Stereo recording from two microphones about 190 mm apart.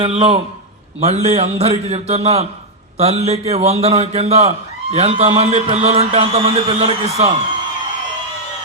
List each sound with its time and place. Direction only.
0.0 s a man's voice: 30° right (ahead or behind)